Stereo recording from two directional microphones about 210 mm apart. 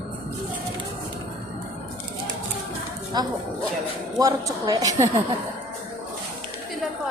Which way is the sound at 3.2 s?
20° right (ahead or behind).